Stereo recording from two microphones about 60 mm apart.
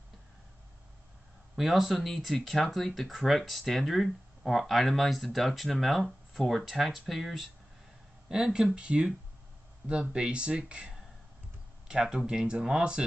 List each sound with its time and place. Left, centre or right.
1.6 s speech: centre